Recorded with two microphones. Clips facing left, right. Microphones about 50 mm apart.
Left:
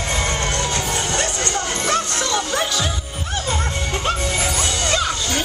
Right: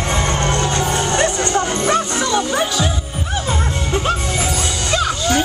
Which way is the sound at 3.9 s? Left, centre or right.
Centre.